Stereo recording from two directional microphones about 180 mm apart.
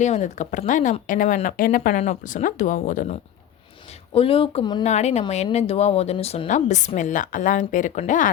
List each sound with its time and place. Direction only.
0.0 s speech: 40° left (ahead or behind)
4.1 s a woman's voice: 30° left (ahead or behind)
4.8 s a woman's voice: 40° left (ahead or behind)